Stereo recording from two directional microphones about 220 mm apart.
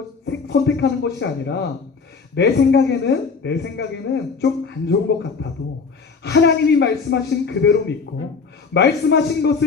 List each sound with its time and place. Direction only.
0.3 s speech: 50° left (ahead or behind)